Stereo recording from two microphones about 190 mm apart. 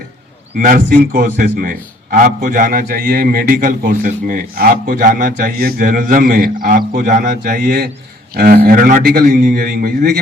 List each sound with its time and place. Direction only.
0.6 s a man's voice: 45° right (ahead or behind)